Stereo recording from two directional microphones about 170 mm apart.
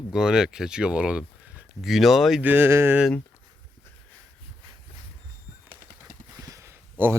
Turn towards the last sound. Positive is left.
turn(degrees=-15)  # may be behind; listen again after turning